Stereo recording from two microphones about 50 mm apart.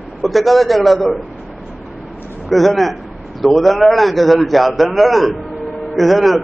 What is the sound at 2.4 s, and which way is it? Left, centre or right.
A man's voice, centre.